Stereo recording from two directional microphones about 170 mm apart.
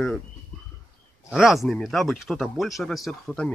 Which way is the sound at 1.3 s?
Centre (ahead or behind).